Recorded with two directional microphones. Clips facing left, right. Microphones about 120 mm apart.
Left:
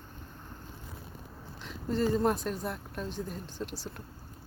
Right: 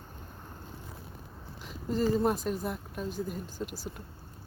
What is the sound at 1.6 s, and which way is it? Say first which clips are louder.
Speech: even; 5° right (ahead or behind).